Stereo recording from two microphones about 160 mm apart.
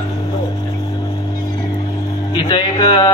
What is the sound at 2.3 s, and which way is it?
Speech, 30° left (ahead or behind).